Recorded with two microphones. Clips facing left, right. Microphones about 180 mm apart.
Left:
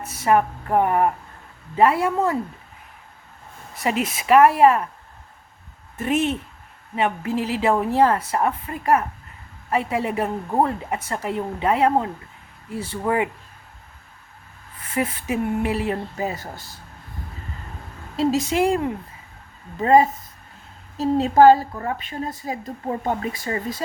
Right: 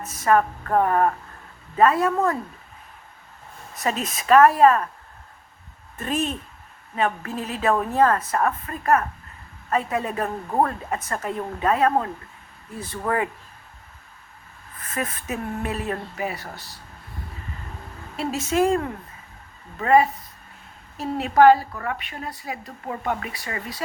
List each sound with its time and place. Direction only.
0.1 s a woman's voice: 25° left (ahead or behind)
2.1 s a woman's voice: 25° left (ahead or behind)
3.8 s a woman's voice: 10° left (ahead or behind)
4.4 s a woman's voice: 25° left (ahead or behind)
6.9 s a woman's voice: 20° left (ahead or behind)
7.3 s a woman's voice: 90° left
7.6 s a woman's voice: 20° left (ahead or behind)
8.1 s a woman's voice: 15° left (ahead or behind)
15.0 s a woman's voice: 15° left (ahead or behind)
16.4 s speech: 50° left (ahead or behind)
18.3 s a woman's voice: 15° left (ahead or behind)